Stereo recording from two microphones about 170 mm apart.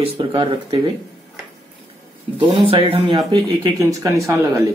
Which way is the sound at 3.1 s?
20° right (ahead or behind).